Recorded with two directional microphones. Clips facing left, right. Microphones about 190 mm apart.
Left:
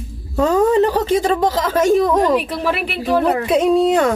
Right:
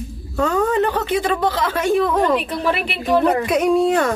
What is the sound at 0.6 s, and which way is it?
A woman's voice, 35° left (ahead or behind).